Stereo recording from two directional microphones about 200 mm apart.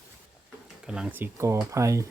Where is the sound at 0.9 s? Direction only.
5° right (ahead or behind).